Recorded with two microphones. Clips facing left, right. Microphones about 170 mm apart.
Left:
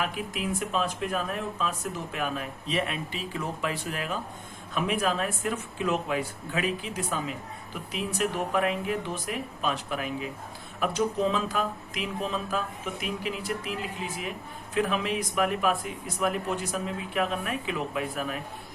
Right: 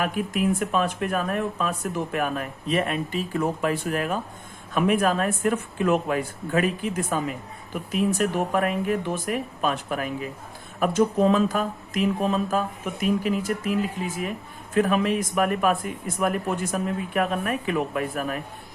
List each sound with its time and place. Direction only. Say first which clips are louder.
0.0 s speech: right 7 dB; 50° right (ahead or behind)